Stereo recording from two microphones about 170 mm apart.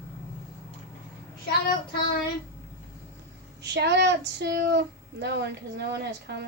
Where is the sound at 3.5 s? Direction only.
85° right.